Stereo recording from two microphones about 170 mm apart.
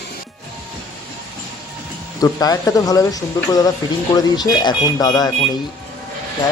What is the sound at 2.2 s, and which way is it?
Speech, 20° left (ahead or behind).